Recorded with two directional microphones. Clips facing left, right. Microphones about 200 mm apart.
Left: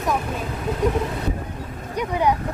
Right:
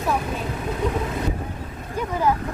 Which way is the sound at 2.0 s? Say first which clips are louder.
Left 1 dB; 15° left (ahead or behind).